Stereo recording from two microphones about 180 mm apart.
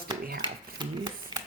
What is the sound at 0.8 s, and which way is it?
Speech, 25° right (ahead or behind).